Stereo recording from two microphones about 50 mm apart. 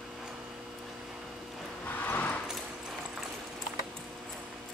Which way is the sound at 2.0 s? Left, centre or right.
Left.